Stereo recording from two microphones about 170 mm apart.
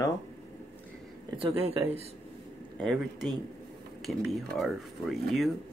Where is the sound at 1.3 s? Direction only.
30° right (ahead or behind).